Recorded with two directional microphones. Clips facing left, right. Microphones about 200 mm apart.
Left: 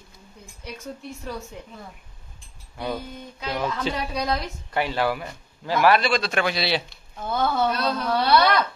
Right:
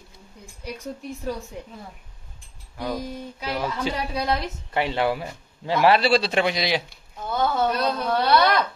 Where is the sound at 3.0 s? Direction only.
10° right (ahead or behind).